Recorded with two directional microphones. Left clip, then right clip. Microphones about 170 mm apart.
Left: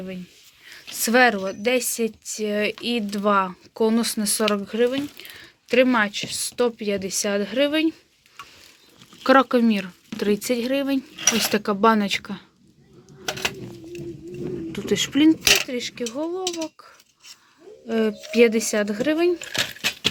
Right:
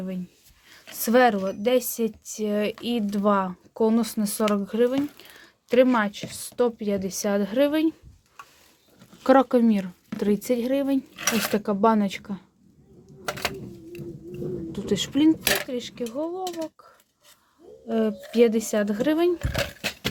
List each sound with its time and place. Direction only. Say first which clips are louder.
0.7 s speech: left 1 dB; 20° right (ahead or behind)
9.2 s speech: left 2 dB; 15° right (ahead or behind)
14.7 s speech: left 4 dB; centre (ahead or behind)
17.8 s speech: left 2 dB; centre (ahead or behind); by 19.4 s 15° right (ahead or behind)